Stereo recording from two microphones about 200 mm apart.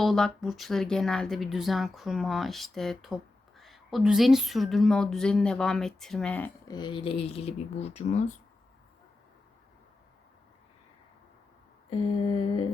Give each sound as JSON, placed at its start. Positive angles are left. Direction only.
{"t": 0.0, "sound": "speech", "side_deg": 0}
{"t": 6.7, "sound": "speech", "side_deg": 20}
{"t": 11.9, "sound": "speech", "side_deg": 30}